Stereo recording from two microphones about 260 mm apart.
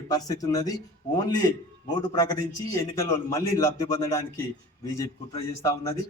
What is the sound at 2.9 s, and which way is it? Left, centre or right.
A man's voice, centre.